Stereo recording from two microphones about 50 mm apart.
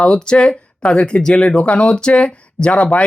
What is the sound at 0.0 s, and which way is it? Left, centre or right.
Speech, centre.